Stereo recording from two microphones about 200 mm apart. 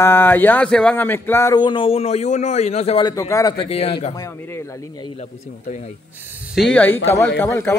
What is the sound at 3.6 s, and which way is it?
Speech, 30° left (ahead or behind).